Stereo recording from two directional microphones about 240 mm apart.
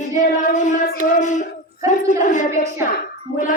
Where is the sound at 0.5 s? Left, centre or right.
Left.